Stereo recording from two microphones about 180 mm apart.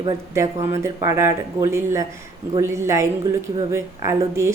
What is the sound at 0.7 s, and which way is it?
A woman's voice, 15° right (ahead or behind).